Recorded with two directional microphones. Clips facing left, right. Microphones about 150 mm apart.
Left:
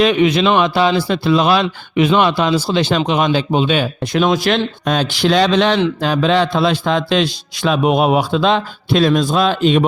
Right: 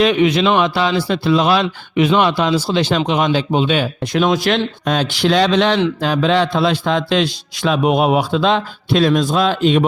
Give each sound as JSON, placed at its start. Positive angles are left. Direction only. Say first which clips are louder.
{"t": 0.0, "sound": "a man's voice", "louder": "left 1 dB", "side_deg": 40}
{"t": 4.0, "sound": "a man's voice", "louder": "left 1 dB", "side_deg": 30}